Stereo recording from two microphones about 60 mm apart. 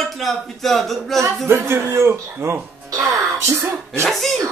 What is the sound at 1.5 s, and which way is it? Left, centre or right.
A man's voice, right.